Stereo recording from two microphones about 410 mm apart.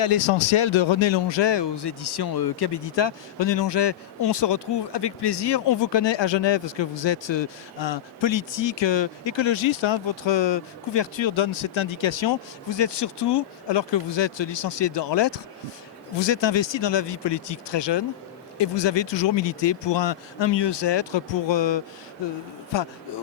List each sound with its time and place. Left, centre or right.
0.7 s a man's voice: left